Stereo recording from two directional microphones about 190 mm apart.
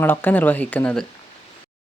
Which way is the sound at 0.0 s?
10° left (ahead or behind).